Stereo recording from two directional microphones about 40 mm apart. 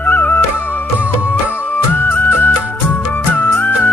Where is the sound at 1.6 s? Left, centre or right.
Left.